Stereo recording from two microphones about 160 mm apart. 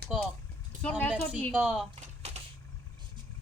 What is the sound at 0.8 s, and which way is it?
Speech, 10° left (ahead or behind).